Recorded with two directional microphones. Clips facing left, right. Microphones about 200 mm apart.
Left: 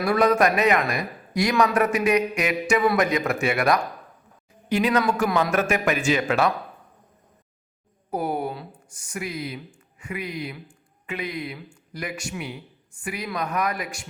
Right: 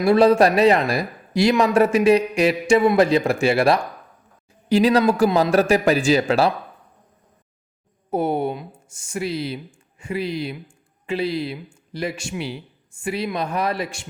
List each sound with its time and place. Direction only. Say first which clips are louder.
0.0 s a man's voice: right 5 dB; 25° right (ahead or behind)
8.1 s speech: right 5 dB; 25° right (ahead or behind)